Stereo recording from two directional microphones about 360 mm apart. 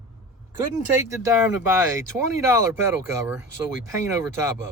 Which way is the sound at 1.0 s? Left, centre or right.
Centre.